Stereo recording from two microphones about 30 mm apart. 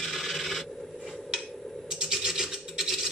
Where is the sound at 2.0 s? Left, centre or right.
Centre.